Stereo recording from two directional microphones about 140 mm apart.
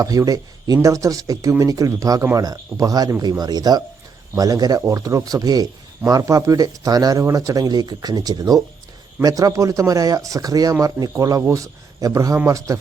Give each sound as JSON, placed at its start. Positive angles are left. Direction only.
{"t": 0.0, "sound": "speech", "side_deg": -25}